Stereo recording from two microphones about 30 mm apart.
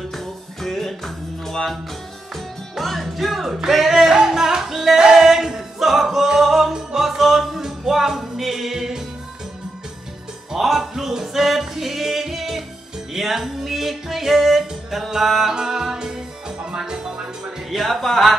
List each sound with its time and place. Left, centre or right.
0.1 s music: centre
2.8 s music: centre
5.0 s male singing: centre
6.2 s music: centre
10.5 s music: centre
15.5 s music: centre
17.6 s speech: centre
18.0 s a sound: centre